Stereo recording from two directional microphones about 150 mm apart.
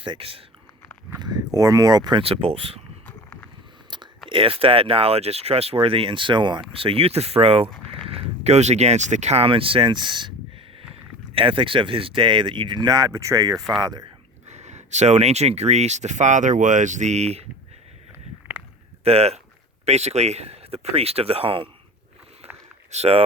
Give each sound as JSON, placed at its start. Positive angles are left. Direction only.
{"t": 0.0, "sound": "speech", "side_deg": -35}
{"t": 1.5, "sound": "speech", "side_deg": -25}
{"t": 3.1, "sound": "a sound", "side_deg": 10}
{"t": 3.8, "sound": "chewing", "side_deg": -30}
{"t": 4.3, "sound": "speech", "side_deg": -35}
{"t": 7.7, "sound": "a sound", "side_deg": 5}
{"t": 8.0, "sound": "speech", "side_deg": -45}
{"t": 11.3, "sound": "speech", "side_deg": -35}
{"t": 14.4, "sound": "speech", "side_deg": -50}
{"t": 19.0, "sound": "speech", "side_deg": -45}
{"t": 22.9, "sound": "speech", "side_deg": -45}